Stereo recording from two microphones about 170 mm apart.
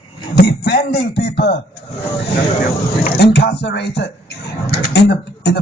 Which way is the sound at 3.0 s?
70° left (ahead or behind).